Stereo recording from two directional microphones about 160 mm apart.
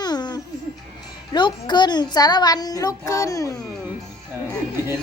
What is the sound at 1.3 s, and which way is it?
A child's voice, 30° left (ahead or behind).